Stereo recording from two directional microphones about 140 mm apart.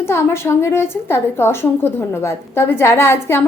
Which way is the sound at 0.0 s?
20° left (ahead or behind).